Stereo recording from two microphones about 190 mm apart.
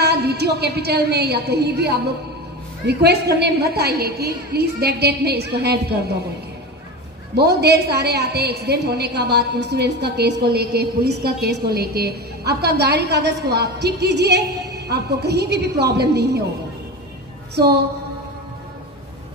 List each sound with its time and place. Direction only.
0.0 s a woman's voice: 60° right (ahead or behind)
7.3 s a woman's voice: 60° right (ahead or behind)